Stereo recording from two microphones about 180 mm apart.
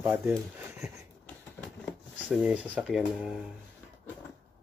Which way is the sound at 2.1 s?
5° right (ahead or behind).